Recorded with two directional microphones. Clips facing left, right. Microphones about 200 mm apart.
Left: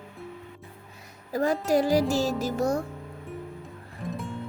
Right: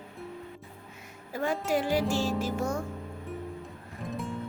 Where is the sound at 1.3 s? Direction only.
40° left (ahead or behind).